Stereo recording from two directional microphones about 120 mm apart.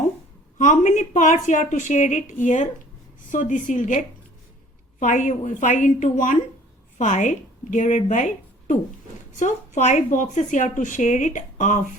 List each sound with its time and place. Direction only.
0.6 s a woman's voice: 85° left